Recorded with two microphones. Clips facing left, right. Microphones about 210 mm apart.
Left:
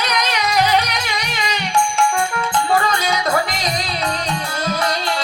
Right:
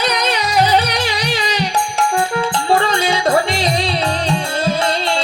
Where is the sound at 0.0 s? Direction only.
30° right (ahead or behind).